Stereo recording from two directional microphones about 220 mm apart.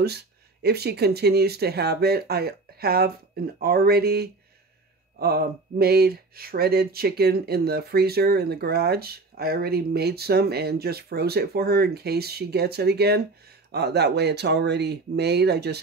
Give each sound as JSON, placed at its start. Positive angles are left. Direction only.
{"t": 0.0, "sound": "speech", "side_deg": -45}